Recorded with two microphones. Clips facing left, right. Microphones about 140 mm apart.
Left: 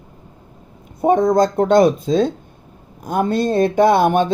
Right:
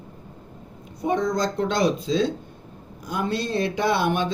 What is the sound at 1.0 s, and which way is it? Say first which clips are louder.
Speech: left 9 dB; 50° left (ahead or behind).